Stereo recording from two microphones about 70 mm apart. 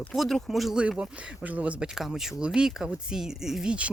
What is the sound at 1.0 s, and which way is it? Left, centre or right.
Speech, centre.